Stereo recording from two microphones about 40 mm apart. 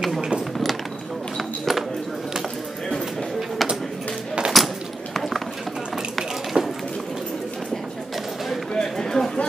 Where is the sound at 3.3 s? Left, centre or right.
Centre.